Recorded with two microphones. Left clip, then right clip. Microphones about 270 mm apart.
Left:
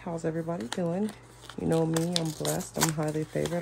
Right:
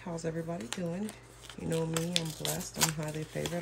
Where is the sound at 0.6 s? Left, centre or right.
Centre.